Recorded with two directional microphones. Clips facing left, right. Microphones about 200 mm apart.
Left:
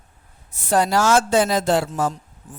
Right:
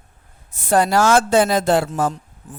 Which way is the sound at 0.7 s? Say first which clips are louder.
Right 2 dB; 55° right (ahead or behind).